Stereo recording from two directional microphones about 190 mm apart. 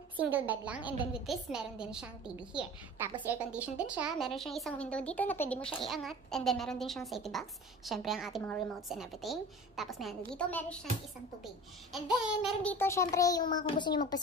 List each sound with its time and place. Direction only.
0.2 s a child's voice: 10° right (ahead or behind)
12.4 s a child's voice: 10° left (ahead or behind)